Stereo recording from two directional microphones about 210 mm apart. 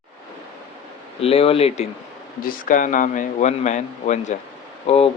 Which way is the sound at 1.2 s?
30° left (ahead or behind).